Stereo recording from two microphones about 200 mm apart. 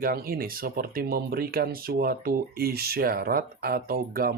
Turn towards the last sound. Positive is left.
turn(degrees=-45)  # may be behind; listen again after turning